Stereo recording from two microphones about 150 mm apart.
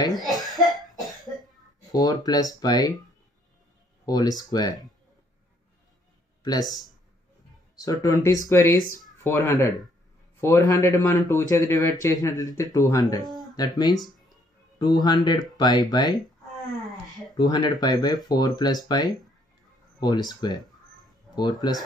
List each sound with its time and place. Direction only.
0.2 s cough: centre (ahead or behind)
1.8 s speech: 25° left (ahead or behind)
4.0 s speech: 25° left (ahead or behind)
6.4 s speech: 25° left (ahead or behind)
17.4 s speech: 30° left (ahead or behind)